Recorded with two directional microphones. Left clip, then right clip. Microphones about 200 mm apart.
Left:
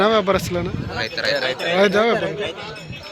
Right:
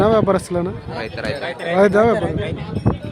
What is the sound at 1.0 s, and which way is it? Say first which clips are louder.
Speech: left 4 dB; 45° right (ahead or behind).